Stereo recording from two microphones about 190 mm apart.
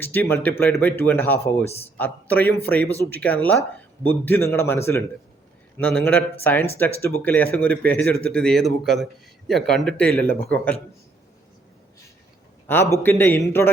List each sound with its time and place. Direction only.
0.0 s speech: 10° left (ahead or behind)
1.6 s a man's voice: 30° left (ahead or behind)
2.0 s speech: 10° left (ahead or behind)
12.6 s speech: 10° left (ahead or behind)